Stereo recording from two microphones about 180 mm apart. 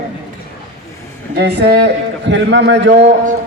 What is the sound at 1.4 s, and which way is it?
Speech, 70° right (ahead or behind).